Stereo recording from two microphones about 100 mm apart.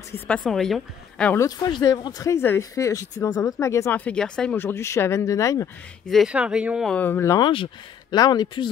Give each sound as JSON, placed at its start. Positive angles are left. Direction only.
{"t": 0.4, "sound": "a woman's voice", "side_deg": 0}
{"t": 1.6, "sound": "speech", "side_deg": 40}
{"t": 2.3, "sound": "speech", "side_deg": 20}
{"t": 2.7, "sound": "speech", "side_deg": 35}
{"t": 3.9, "sound": "speech", "side_deg": 15}
{"t": 4.6, "sound": "speech", "side_deg": 25}
{"t": 6.2, "sound": "speech", "side_deg": -10}
{"t": 6.9, "sound": "speech", "side_deg": 20}
{"t": 7.3, "sound": "speech", "side_deg": 55}